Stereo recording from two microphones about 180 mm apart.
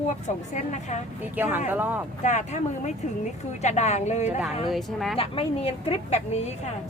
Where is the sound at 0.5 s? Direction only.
40° left (ahead or behind).